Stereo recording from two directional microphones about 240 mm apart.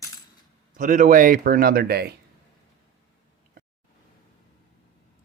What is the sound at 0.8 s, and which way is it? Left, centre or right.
Speech, right.